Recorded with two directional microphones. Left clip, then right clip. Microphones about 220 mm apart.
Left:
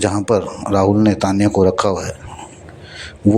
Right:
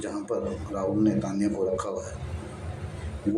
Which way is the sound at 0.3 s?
40° left (ahead or behind).